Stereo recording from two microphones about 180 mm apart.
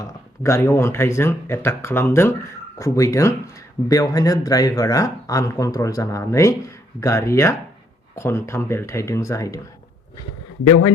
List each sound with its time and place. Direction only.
0.0 s speech: 15° left (ahead or behind)